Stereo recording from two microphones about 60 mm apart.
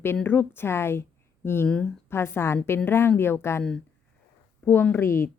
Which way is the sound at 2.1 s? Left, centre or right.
Left.